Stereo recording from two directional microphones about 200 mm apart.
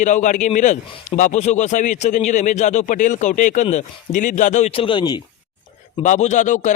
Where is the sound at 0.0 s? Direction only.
40° left (ahead or behind); by 5.2 s 20° left (ahead or behind).